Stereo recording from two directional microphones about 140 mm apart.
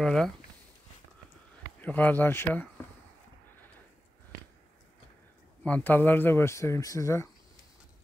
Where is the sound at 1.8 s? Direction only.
10° left (ahead or behind).